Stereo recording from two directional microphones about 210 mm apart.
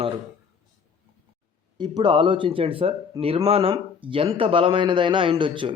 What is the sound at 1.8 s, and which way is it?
Speech, 20° right (ahead or behind).